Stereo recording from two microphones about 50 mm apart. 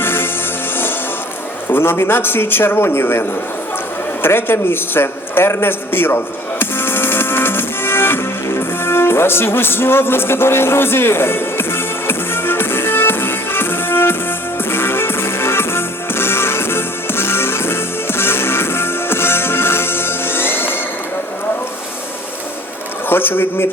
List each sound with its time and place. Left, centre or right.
0.0 s music: left
1.7 s a man's voice: left
4.2 s a sound: left
8.5 s music: left
23.0 s speech: left